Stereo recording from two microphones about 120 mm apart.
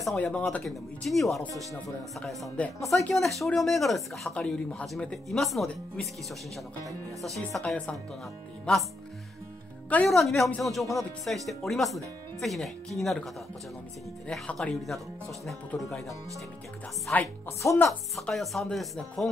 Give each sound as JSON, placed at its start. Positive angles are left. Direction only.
{"t": 0.2, "sound": "speech", "side_deg": 10}
{"t": 7.2, "sound": "speech", "side_deg": 0}
{"t": 10.0, "sound": "speech", "side_deg": 0}
{"t": 17.1, "sound": "speech", "side_deg": 15}
{"t": 17.6, "sound": "speech", "side_deg": 25}
{"t": 18.1, "sound": "speech", "side_deg": 0}